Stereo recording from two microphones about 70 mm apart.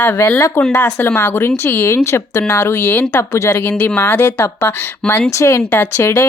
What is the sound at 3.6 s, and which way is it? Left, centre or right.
Speech, left.